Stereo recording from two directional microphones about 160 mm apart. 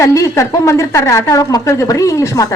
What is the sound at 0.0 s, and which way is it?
A woman's voice, 20° left (ahead or behind).